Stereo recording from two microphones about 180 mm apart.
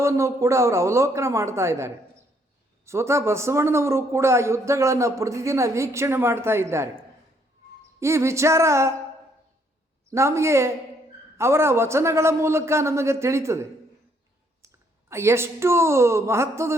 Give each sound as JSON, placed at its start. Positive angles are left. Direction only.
{"t": 0.0, "sound": "a man's voice", "side_deg": -15}
{"t": 10.1, "sound": "a man's voice", "side_deg": -15}
{"t": 15.1, "sound": "a man's voice", "side_deg": -15}